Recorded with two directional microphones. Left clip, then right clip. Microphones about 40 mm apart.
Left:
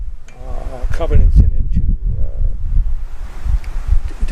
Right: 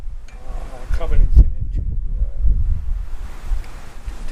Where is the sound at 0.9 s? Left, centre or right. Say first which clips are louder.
Left 8 dB; left.